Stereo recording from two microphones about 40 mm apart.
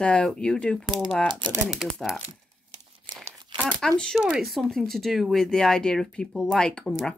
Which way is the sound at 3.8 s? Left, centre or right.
Centre.